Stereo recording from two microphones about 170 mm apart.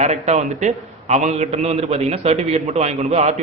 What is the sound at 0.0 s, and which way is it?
A man's voice, 40° right (ahead or behind).